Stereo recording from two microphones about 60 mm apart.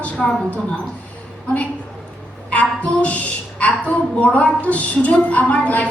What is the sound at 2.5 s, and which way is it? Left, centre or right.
A woman's voice, left.